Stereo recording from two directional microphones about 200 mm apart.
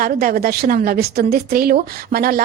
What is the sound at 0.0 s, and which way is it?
A woman's voice, 45° right (ahead or behind).